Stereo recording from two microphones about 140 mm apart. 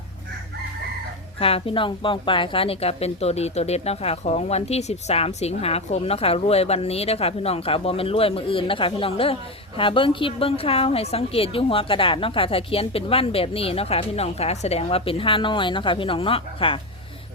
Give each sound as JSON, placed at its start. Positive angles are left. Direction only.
{"t": 1.4, "sound": "speech", "side_deg": 40}